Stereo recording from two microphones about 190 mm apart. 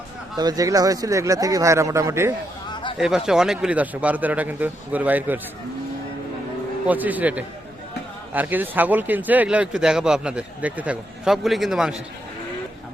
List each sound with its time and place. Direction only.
0.3 s speech: 20° right (ahead or behind)
3.0 s speech: 5° right (ahead or behind)
6.8 s speech: 10° right (ahead or behind)